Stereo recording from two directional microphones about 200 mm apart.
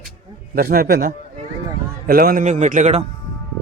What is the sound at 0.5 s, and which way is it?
A man's voice, 45° right (ahead or behind).